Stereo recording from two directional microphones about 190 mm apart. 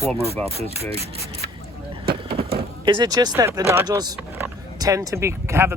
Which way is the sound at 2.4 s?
55° right (ahead or behind).